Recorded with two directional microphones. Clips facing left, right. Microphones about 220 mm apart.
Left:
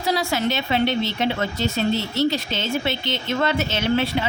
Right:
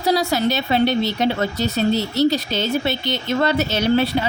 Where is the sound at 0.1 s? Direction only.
40° right (ahead or behind).